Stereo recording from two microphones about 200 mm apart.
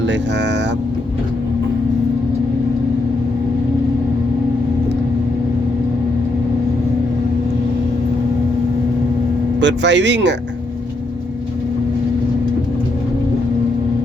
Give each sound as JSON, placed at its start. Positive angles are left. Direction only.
{"t": 9.6, "sound": "speech", "side_deg": -65}